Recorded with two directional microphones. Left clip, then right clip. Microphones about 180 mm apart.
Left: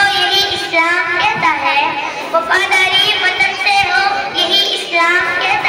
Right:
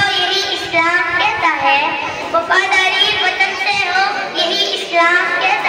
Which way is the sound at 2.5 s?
45° left (ahead or behind).